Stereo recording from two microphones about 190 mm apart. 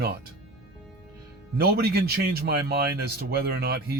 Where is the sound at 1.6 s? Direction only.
55° right (ahead or behind).